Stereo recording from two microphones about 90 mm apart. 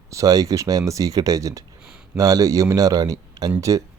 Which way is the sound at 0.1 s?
40° right (ahead or behind).